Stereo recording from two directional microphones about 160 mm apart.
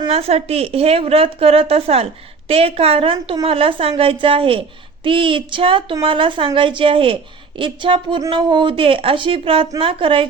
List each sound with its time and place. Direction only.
0.1 s a woman's voice: 40° right (ahead or behind)